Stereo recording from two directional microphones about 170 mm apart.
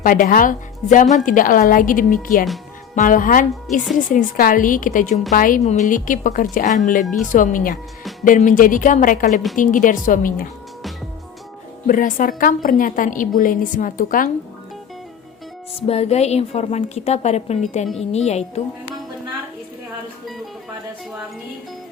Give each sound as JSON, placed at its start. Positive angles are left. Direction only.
{"t": 0.0, "sound": "a woman's voice", "side_deg": 55}
{"t": 11.9, "sound": "a woman's voice", "side_deg": 50}
{"t": 15.7, "sound": "a woman's voice", "side_deg": 35}